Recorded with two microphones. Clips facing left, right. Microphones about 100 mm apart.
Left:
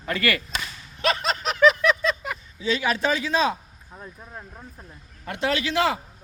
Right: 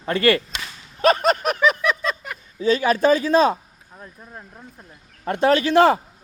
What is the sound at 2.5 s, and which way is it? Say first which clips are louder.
A man's voice: right 6 dB; 45° right (ahead or behind).